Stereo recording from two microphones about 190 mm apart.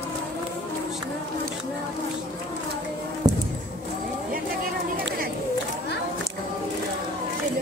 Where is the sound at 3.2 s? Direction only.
20° right (ahead or behind).